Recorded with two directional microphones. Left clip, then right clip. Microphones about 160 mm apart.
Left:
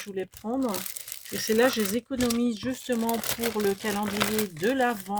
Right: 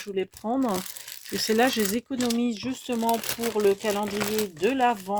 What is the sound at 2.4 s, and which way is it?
Speech, 25° right (ahead or behind).